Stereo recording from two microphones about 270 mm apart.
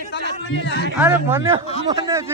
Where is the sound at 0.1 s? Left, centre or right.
Left.